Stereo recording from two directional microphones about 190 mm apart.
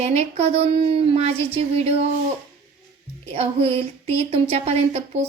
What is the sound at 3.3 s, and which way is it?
Speech, 30° right (ahead or behind).